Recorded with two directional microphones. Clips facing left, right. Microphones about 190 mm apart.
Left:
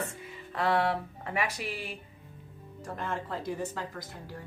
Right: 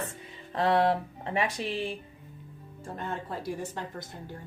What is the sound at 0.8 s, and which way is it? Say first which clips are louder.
Speech: right 4 dB; 30° right (ahead or behind).